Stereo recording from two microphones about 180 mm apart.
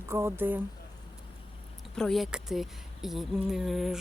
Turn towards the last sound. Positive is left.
turn(degrees=0)  # may be behind; listen again after turning